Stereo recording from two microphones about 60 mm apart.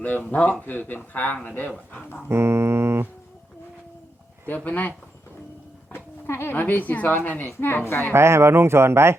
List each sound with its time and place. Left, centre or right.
0.3 s speech: left
2.3 s a sound: right
4.4 s speech: left
5.9 s speech: left
7.5 s speech: left
8.1 s speech: right